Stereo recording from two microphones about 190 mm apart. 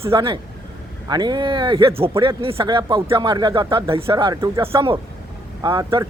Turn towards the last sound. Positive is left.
turn(degrees=-25)  # may be behind; listen again after turning